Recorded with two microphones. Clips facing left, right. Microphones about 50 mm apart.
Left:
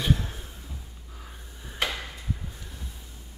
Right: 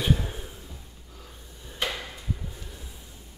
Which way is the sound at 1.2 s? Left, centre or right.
Centre.